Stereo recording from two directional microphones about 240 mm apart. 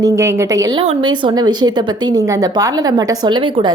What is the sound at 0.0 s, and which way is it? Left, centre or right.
A woman's voice, centre.